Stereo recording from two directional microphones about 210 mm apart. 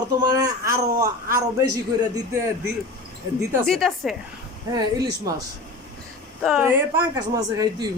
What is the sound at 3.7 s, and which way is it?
Speech, centre (ahead or behind).